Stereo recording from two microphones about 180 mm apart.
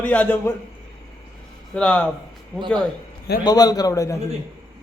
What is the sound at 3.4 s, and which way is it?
Speech, 20° left (ahead or behind).